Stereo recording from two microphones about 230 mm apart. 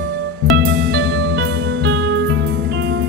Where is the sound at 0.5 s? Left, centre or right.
Right.